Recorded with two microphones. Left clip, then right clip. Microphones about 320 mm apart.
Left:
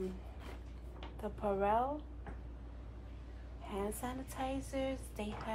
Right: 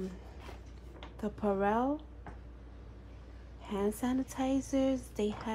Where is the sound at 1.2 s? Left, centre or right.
Right.